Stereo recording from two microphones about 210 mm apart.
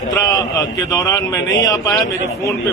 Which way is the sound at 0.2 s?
15° left (ahead or behind).